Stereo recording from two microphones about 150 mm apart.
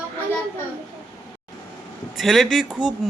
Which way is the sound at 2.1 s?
Centre (ahead or behind).